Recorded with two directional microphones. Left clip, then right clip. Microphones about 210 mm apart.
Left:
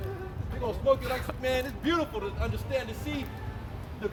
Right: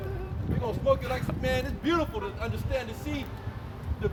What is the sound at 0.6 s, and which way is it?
A man's voice, centre (ahead or behind).